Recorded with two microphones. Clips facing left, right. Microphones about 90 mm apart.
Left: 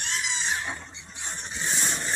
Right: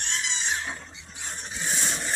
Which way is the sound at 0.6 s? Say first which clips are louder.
Left 1 dB; 40° left (ahead or behind).